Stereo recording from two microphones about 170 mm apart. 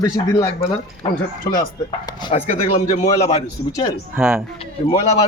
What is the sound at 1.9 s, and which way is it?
Speech, 30° left (ahead or behind).